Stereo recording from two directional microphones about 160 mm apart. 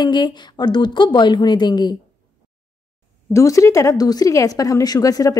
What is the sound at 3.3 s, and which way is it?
A woman's voice, 20° left (ahead or behind).